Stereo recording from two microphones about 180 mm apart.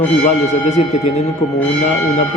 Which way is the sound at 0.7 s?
40° left (ahead or behind).